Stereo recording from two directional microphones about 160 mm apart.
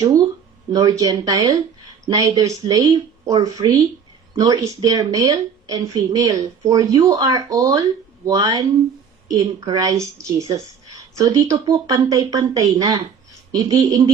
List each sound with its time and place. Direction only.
0.7 s speech: 25° right (ahead or behind)